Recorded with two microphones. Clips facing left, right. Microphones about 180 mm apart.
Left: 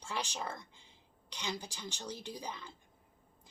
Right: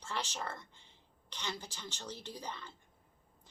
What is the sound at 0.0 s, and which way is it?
A woman's voice, 15° left (ahead or behind).